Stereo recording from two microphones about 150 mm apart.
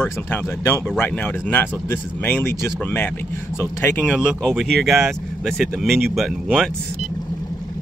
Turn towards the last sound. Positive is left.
turn(degrees=0)  # may be behind; listen again after turning